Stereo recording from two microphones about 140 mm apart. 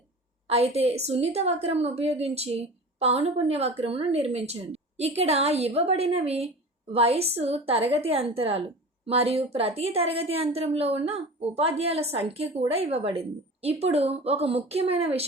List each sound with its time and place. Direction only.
0.4 s a woman's voice: 45° right (ahead or behind)